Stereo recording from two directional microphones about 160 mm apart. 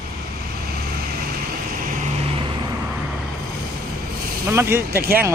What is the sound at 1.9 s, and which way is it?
Vehicle, 55° right (ahead or behind).